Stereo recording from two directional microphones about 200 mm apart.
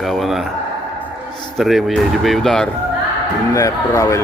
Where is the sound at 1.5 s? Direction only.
Centre (ahead or behind).